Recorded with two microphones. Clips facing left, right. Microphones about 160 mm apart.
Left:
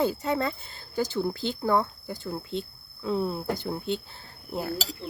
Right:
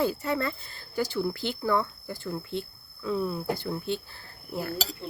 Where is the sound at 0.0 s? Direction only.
20° left (ahead or behind).